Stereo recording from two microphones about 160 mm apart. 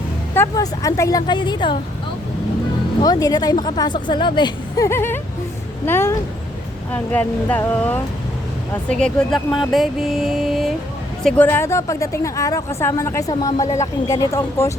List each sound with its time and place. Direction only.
0.3 s a woman's voice: 20° left (ahead or behind)
3.0 s a woman's voice: 25° left (ahead or behind)
4.9 s speech: 15° left (ahead or behind)
8.9 s music: 5° left (ahead or behind)
11.2 s a woman's voice: 5° left (ahead or behind)